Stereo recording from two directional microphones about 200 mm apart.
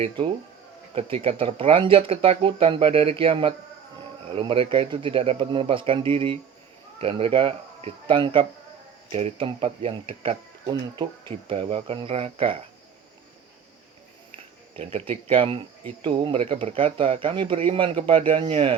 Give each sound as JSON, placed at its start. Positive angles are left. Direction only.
{"t": 0.9, "sound": "speech", "side_deg": -30}
{"t": 14.8, "sound": "speech", "side_deg": -30}